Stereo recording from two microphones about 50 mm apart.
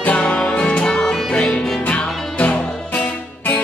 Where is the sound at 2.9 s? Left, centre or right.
Left.